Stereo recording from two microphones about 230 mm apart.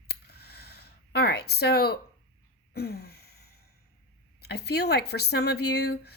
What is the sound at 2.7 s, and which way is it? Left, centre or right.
Gasp, left.